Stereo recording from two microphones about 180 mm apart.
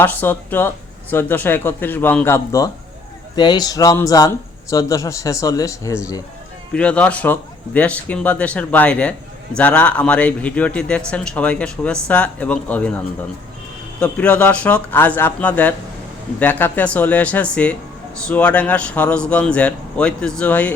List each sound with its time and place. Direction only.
0.0 s speech: 10° left (ahead or behind)
6.7 s speech: 5° left (ahead or behind)